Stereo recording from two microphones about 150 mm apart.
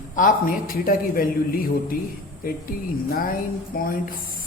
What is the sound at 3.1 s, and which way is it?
A man's voice, 75° left (ahead or behind).